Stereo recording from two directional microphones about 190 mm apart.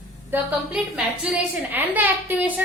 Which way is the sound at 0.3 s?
5° right (ahead or behind).